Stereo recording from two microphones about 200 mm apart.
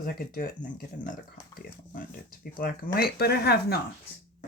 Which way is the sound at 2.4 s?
45° left (ahead or behind).